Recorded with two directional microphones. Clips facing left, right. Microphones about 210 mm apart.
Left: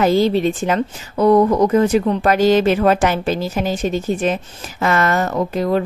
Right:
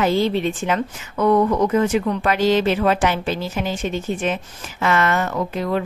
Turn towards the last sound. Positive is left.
turn(degrees=40)  # may be behind; listen again after turning